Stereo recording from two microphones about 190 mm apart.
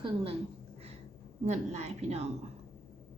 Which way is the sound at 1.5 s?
35° right (ahead or behind).